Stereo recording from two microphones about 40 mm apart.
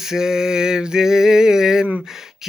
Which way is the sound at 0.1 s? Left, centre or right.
Centre.